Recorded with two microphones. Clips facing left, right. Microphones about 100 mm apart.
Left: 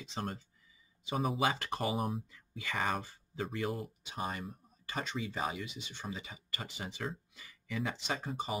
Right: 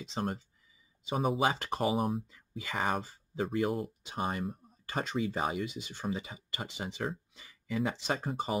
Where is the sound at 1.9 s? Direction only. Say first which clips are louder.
Right 4 dB; centre (ahead or behind).